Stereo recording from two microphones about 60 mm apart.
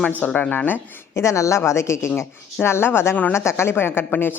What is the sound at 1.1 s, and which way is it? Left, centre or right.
A woman's voice, left.